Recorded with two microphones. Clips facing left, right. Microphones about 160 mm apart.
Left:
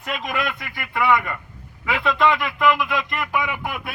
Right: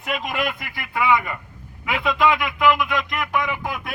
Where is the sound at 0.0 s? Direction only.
Centre (ahead or behind).